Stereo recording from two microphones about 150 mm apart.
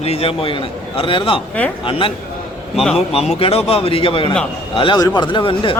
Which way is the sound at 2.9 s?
45° left (ahead or behind).